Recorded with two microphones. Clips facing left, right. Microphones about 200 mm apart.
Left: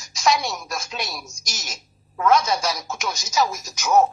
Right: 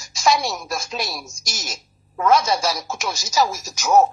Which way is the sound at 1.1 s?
30° right (ahead or behind).